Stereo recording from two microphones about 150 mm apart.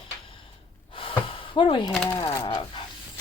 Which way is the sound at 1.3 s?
35° left (ahead or behind).